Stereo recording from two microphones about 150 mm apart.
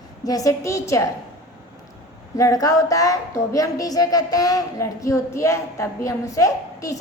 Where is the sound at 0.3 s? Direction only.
25° left (ahead or behind).